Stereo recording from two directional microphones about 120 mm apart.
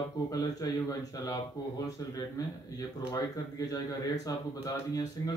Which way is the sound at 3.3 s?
30° left (ahead or behind).